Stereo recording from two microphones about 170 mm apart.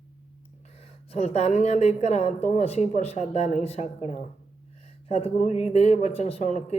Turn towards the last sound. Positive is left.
turn(degrees=40)  # may be behind; listen again after turning